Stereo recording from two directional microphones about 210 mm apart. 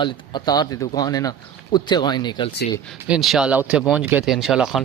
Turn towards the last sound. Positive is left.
turn(degrees=0)  # may be behind; listen again after turning